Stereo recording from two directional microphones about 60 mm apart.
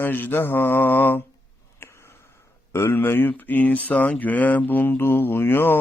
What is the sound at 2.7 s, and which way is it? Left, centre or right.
Speech, left.